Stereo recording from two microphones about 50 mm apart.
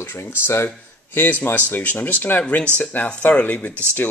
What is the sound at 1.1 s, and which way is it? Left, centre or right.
Speech, left.